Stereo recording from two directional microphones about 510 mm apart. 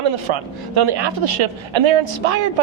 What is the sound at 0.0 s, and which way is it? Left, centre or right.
Speech, right.